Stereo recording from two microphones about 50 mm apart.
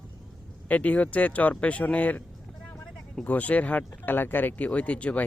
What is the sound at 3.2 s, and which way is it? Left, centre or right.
Speech, left.